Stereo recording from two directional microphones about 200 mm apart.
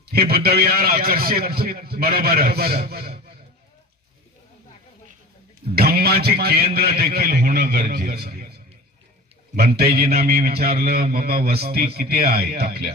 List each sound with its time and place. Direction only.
0.0 s a man's voice: 50° right (ahead or behind)
5.7 s a man's voice: 50° right (ahead or behind)
9.6 s a man's voice: 50° right (ahead or behind)